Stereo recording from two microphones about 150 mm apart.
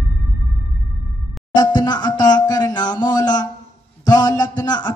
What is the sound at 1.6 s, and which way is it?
Music, 30° left (ahead or behind).